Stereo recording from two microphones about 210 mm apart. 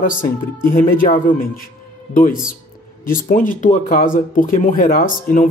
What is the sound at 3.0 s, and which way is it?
Speech, 40° left (ahead or behind).